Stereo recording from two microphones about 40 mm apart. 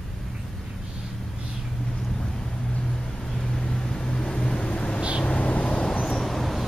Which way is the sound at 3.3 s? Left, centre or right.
Centre.